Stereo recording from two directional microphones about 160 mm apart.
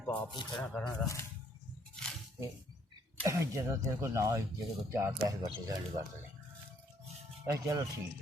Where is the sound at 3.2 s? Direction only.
20° right (ahead or behind).